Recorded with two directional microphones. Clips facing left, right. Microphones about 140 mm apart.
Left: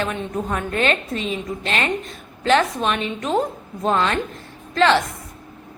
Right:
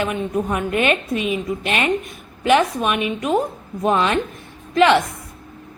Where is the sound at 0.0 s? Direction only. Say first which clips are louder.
Right 3 dB; 15° right (ahead or behind).